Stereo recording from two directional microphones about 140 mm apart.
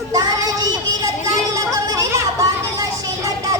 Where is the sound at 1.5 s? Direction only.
25° right (ahead or behind).